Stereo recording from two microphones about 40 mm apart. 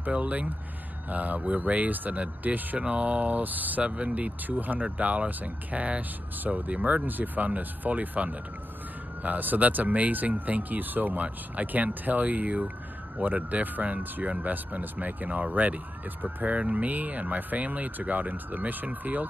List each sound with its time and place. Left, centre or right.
0.1 s speech: right
2.9 s speech: right
3.8 s speech: right
4.5 s speech: right
4.8 s speech: right
14.5 s speech: right
15.2 s speech: right
16.5 s speech: right